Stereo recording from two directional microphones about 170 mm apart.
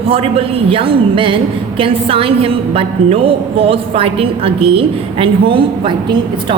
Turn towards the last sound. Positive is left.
turn(degrees=-30)  # may be behind; listen again after turning